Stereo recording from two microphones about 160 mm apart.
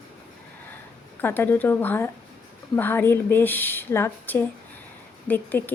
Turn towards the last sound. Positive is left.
turn(degrees=10)  # may be behind; listen again after turning